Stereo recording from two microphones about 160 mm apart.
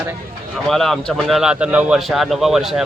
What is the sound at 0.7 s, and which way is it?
A man's voice, centre (ahead or behind).